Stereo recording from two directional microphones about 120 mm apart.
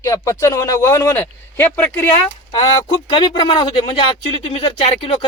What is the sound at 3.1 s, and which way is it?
Speech, 40° left (ahead or behind).